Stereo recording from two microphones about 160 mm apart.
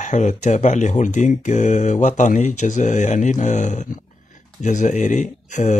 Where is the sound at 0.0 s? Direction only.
50° left (ahead or behind).